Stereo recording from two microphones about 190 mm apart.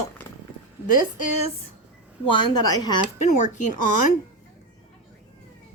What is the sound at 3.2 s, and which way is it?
Speech, 40° left (ahead or behind).